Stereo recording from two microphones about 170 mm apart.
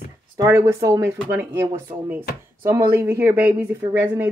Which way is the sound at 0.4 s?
15° right (ahead or behind).